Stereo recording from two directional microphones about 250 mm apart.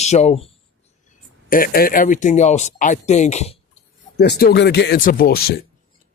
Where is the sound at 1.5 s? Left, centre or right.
Left.